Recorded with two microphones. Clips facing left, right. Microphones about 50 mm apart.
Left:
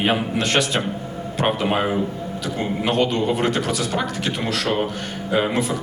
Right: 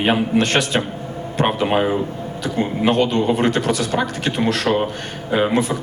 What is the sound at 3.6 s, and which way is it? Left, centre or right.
A man's voice, right.